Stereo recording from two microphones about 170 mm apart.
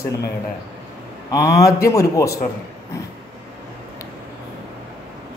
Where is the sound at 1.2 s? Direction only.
20° left (ahead or behind).